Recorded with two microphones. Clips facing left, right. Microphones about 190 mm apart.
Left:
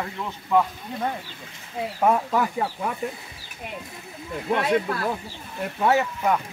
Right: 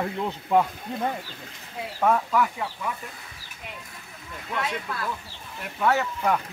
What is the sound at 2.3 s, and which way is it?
Speech, 35° left (ahead or behind).